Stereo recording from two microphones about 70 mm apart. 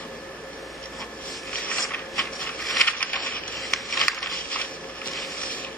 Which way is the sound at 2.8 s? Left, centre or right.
Left.